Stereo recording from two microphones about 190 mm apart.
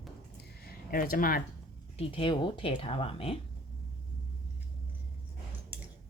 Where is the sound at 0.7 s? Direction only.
50° left (ahead or behind).